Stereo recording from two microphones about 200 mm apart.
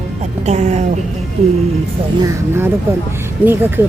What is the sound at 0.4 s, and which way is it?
Speech, 35° right (ahead or behind).